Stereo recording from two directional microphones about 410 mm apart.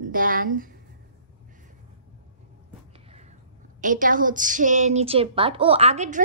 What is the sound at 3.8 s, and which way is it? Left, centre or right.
A woman's voice, centre.